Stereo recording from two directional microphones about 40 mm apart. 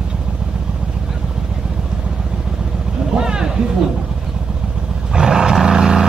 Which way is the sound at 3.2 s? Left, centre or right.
Centre.